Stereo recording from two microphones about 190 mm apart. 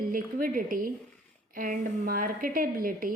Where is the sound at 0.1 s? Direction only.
45° right (ahead or behind).